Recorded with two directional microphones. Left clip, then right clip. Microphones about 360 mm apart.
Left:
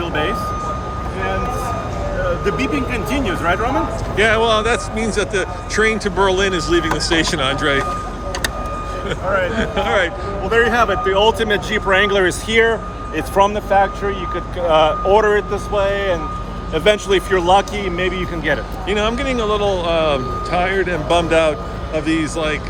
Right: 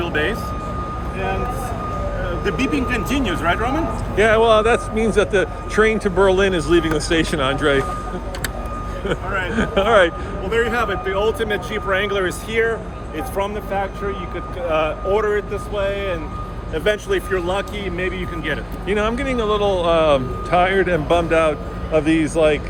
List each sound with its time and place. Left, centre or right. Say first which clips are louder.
0.0 s vehicle: left 1 dB; centre
2.4 s speech: left 2 dB; centre
9.0 s speech: left 4 dB; centre
10.5 s speech: left 5 dB; centre
18.9 s speech: left 2 dB; centre